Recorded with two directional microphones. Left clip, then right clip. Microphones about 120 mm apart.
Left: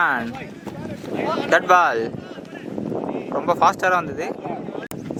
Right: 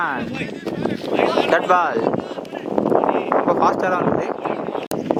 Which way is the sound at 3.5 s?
20° left (ahead or behind).